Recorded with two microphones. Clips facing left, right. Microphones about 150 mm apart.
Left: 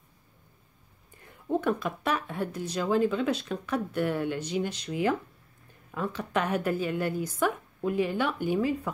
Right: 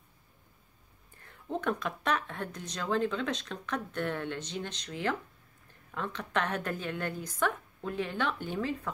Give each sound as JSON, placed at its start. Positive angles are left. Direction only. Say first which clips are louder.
{"t": 1.2, "sound": "speech", "louder": "left 5 dB", "side_deg": 10}